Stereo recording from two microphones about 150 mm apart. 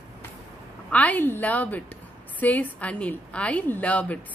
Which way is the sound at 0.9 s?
10° left (ahead or behind).